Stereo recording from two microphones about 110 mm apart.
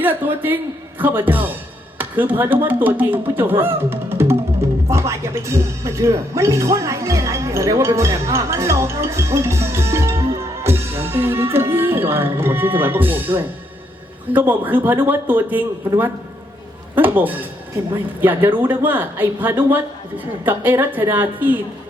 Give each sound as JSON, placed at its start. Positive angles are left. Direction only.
{"t": 0.0, "sound": "speech", "side_deg": -20}
{"t": 10.6, "sound": "music", "side_deg": -20}
{"t": 14.3, "sound": "speech", "side_deg": -15}